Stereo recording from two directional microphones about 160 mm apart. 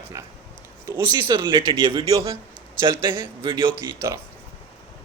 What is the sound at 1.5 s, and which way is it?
Speech, 30° right (ahead or behind).